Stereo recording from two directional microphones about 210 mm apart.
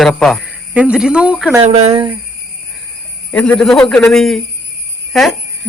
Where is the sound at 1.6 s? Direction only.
30° right (ahead or behind).